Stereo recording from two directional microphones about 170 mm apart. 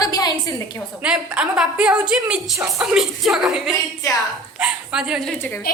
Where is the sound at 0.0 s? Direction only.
20° left (ahead or behind).